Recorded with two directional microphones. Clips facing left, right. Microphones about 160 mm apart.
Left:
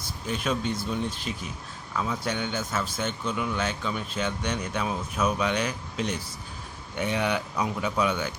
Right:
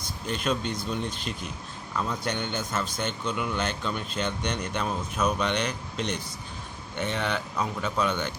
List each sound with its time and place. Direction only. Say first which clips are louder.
0.3 s speech: even; 5° left (ahead or behind)